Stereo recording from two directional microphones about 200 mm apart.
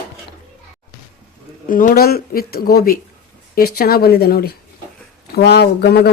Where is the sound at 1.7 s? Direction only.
45° left (ahead or behind).